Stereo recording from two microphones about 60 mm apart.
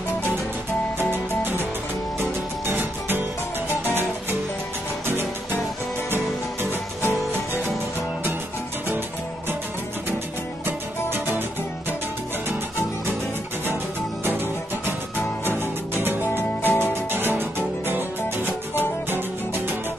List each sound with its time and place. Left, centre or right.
2.1 s music: right
7.0 s music: left
15.4 s music: right